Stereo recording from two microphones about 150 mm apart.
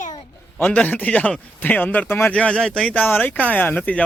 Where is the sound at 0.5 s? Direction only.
10° left (ahead or behind).